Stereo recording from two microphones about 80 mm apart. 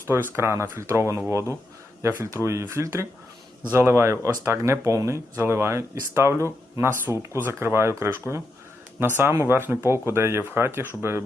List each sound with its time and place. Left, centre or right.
0.1 s speech: right